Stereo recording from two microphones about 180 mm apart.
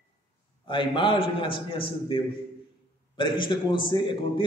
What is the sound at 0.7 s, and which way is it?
A man's voice, 25° left (ahead or behind).